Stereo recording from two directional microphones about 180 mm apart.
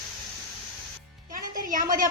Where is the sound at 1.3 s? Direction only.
50° right (ahead or behind).